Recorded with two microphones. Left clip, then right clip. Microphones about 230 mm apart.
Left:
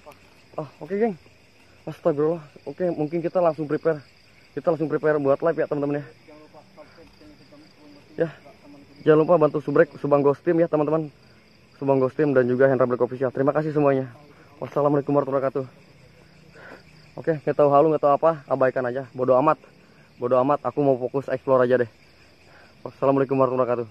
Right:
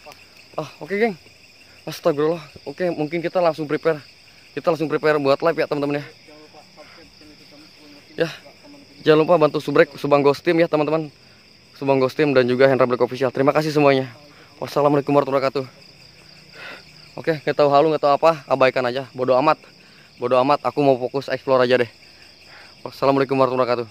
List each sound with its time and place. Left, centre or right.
0.6 s speech: right
3.0 s speech: centre
9.0 s speech: centre
16.5 s cricket: right
17.5 s speech: centre
18.2 s speech: right
19.1 s speech: centre
21.2 s speech: centre
22.8 s speech: centre